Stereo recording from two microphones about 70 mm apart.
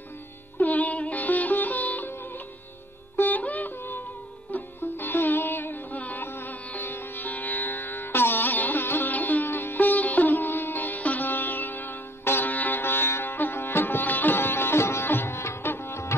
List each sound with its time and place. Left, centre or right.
0.6 s sitar: left
3.2 s music: left
15.0 s sitar: left